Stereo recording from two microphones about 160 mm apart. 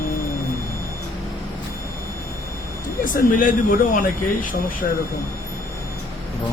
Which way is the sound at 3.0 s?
55° left (ahead or behind).